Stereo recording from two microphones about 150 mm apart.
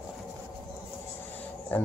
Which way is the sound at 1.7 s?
10° left (ahead or behind).